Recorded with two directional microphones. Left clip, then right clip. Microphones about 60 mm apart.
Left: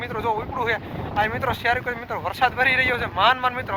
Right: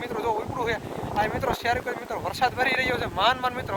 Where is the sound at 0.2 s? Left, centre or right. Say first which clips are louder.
Left 3 dB; centre.